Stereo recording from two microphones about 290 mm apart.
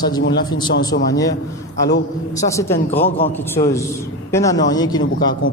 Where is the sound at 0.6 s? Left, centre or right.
Left.